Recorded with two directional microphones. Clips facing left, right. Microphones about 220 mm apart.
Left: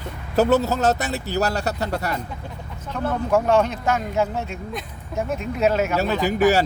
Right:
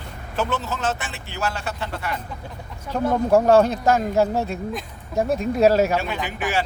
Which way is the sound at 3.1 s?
35° right (ahead or behind).